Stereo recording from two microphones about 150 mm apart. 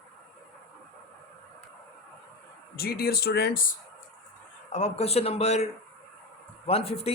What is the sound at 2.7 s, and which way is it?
Speech, 90° left.